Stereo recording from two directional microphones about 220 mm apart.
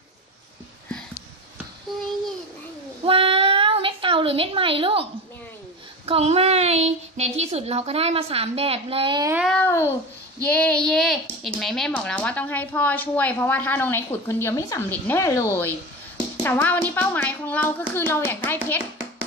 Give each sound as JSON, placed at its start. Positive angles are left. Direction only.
{"t": 3.1, "sound": "child singing", "side_deg": -25}
{"t": 6.0, "sound": "a woman's voice", "side_deg": -25}
{"t": 9.3, "sound": "a sound", "side_deg": -5}
{"t": 9.6, "sound": "a child's voice", "side_deg": 10}